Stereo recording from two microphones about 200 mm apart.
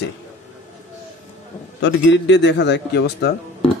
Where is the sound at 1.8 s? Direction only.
65° left (ahead or behind).